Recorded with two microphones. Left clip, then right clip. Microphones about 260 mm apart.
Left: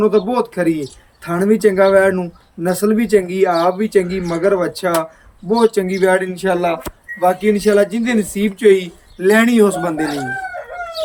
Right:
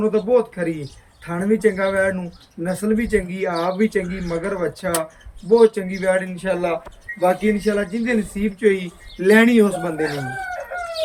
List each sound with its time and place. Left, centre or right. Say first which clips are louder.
0.0 s speech: left 3 dB; left